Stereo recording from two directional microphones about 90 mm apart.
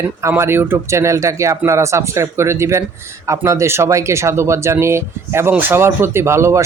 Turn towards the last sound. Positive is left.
turn(degrees=-30)  # may be behind; listen again after turning